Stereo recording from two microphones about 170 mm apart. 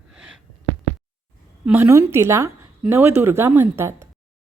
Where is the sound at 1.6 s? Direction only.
10° right (ahead or behind).